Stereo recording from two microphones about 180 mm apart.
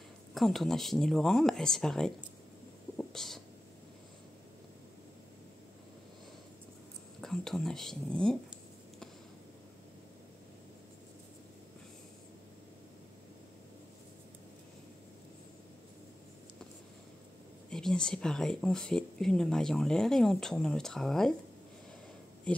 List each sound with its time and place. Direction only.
0.3 s speech: centre (ahead or behind)
3.0 s a sound: centre (ahead or behind)
7.2 s speech: centre (ahead or behind)
17.6 s speech: 5° left (ahead or behind)
22.5 s speech: 5° left (ahead or behind)